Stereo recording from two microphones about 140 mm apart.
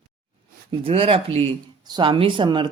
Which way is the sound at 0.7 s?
40° right (ahead or behind).